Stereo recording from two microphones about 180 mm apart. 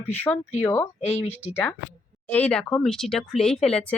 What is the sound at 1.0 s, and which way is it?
Speech, 35° left (ahead or behind).